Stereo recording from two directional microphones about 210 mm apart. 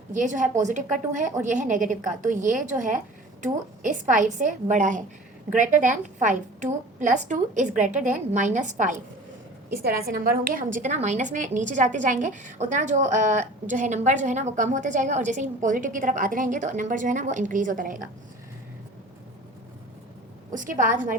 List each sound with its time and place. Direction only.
0.1 s a woman's voice: 35° right (ahead or behind)
20.5 s a woman's voice: 40° right (ahead or behind)